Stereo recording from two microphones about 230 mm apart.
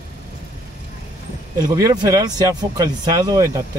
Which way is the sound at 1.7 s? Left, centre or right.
Centre.